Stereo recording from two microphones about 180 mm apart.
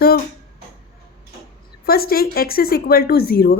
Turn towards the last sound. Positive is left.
turn(degrees=60)  # may be behind; listen again after turning